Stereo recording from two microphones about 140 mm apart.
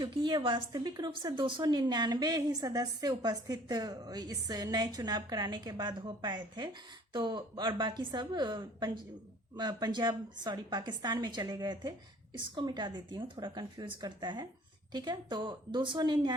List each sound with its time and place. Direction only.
0.0 s a woman's voice: 35° right (ahead or behind)